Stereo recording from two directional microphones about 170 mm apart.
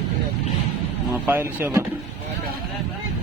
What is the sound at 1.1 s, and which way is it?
Speech, 10° right (ahead or behind).